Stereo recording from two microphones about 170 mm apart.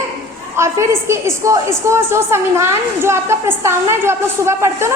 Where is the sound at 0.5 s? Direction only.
15° right (ahead or behind).